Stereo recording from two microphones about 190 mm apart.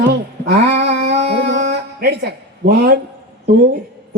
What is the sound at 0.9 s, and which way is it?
Music, 65° right (ahead or behind).